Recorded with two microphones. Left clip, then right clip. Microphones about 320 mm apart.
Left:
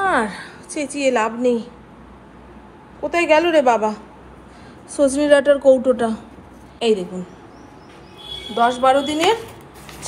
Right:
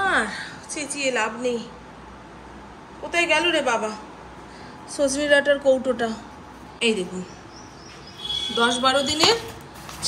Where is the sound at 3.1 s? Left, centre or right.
Centre.